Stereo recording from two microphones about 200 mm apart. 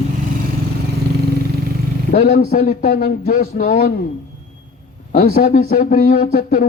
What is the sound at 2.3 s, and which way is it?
Speech, 45° left (ahead or behind).